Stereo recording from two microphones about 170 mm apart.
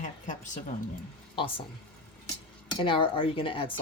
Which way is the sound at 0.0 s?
45° left (ahead or behind).